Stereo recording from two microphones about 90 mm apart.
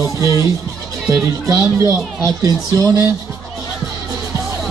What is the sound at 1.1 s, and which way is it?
Speech, 40° right (ahead or behind).